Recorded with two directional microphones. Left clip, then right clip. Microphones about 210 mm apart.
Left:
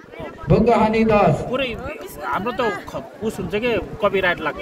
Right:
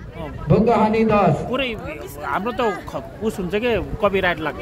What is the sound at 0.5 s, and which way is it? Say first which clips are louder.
Speech: left 1 dB; 55° left (ahead or behind).